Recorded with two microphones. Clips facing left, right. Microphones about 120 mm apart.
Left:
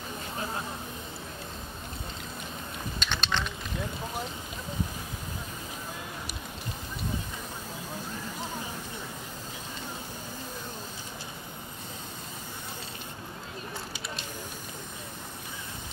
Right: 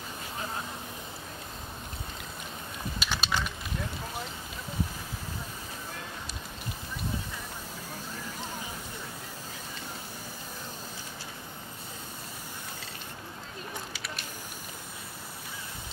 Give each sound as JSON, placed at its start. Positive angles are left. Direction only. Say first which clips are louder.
{"t": 3.0, "sound": "typing", "louder": "even", "side_deg": -5}
{"t": 13.9, "sound": "spray", "louder": "left 2 dB", "side_deg": 25}